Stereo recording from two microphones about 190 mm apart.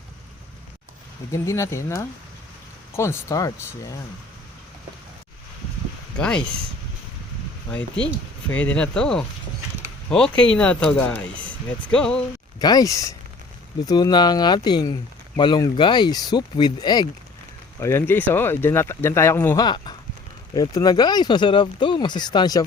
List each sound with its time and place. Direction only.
1.3 s speech: 15° left (ahead or behind)
6.1 s speech: 5° left (ahead or behind)
8.4 s speech: 10° left (ahead or behind)
12.5 s speech: 20° left (ahead or behind)
19.6 s speech: 25° left (ahead or behind)